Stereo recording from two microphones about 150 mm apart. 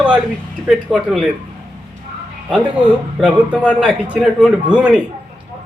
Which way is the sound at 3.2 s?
5° right (ahead or behind).